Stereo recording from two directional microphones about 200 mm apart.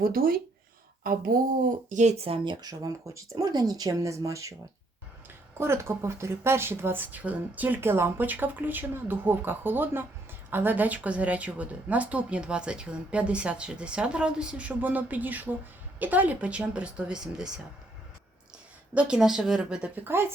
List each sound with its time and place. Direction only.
0.0 s speech: 45° right (ahead or behind)
1.9 s speech: 35° right (ahead or behind); by 4.5 s 15° right (ahead or behind)
5.5 s a woman's voice: 15° right (ahead or behind)
18.9 s speech: 5° right (ahead or behind)